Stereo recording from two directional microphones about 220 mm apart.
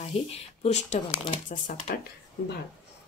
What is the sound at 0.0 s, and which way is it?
Speech, 25° left (ahead or behind).